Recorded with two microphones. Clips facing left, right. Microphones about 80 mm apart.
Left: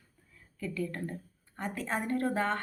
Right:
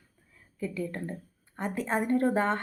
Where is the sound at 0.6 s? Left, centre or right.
Right.